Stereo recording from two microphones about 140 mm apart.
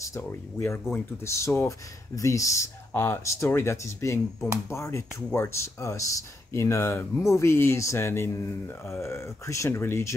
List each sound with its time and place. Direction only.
0.0 s speech: 20° left (ahead or behind)